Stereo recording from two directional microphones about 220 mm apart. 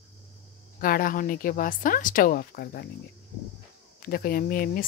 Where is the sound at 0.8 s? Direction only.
40° left (ahead or behind).